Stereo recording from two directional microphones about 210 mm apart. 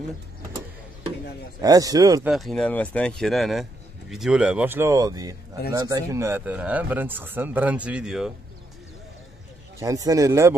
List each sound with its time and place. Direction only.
1.6 s speech: 15° right (ahead or behind)
2.2 s speech: centre (ahead or behind)
9.8 s speech: 15° right (ahead or behind)